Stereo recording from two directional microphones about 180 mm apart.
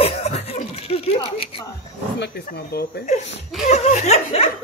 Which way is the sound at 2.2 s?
60° left (ahead or behind).